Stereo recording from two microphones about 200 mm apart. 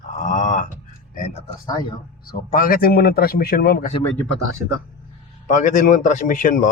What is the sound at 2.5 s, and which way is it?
A man's voice, 45° left (ahead or behind).